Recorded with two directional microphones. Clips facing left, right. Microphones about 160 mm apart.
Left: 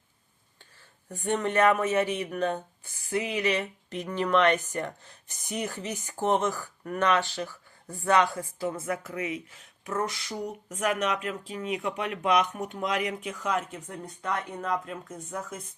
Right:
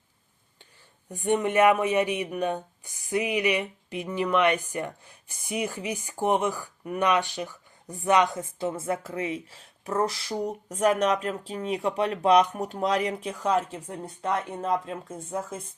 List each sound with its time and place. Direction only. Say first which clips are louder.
1.0 s speech: right 3 dB; 15° right (ahead or behind)